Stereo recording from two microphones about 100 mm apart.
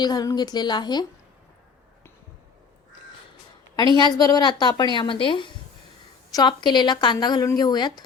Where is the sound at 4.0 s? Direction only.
45° left (ahead or behind).